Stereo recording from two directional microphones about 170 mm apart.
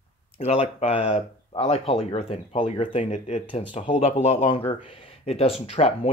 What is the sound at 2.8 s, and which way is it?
Speech, 45° left (ahead or behind).